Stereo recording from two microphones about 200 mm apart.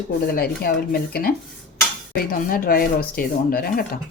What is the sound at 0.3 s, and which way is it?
Speech, 50° left (ahead or behind).